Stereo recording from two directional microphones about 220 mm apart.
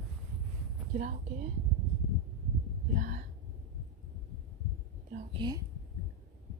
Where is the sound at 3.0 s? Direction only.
35° right (ahead or behind).